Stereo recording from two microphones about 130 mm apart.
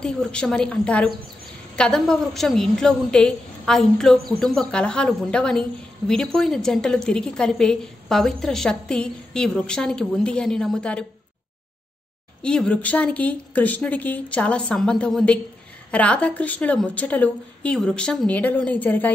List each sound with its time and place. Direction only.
0.0 s a woman's voice: 5° left (ahead or behind)
12.4 s a woman's voice: 5° left (ahead or behind)